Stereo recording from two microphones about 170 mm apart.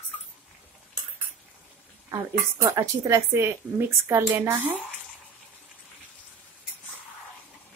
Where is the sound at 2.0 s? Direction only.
20° right (ahead or behind).